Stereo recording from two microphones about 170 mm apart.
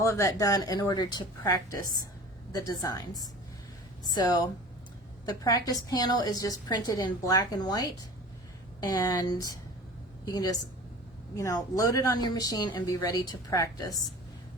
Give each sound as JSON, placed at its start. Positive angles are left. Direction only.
{"t": 0.0, "sound": "a woman's voice", "side_deg": 15}